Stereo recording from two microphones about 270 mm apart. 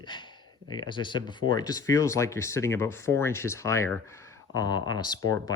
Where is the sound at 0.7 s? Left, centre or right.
Centre.